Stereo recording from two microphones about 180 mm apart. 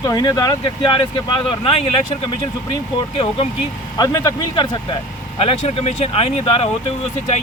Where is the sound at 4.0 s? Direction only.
20° left (ahead or behind).